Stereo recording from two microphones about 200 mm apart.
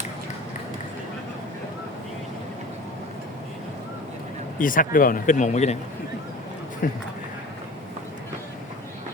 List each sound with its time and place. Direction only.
4.5 s speech: 40° left (ahead or behind)
6.8 s speech: 45° left (ahead or behind)